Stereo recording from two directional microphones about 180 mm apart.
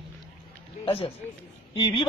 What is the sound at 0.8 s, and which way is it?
Speech, 30° left (ahead or behind).